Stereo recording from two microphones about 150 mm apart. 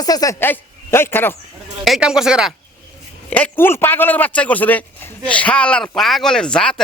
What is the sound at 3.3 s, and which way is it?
A man's voice, 10° left (ahead or behind).